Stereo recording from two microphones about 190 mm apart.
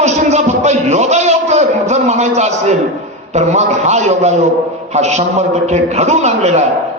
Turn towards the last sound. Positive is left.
turn(degrees=-35)  # may be behind; listen again after turning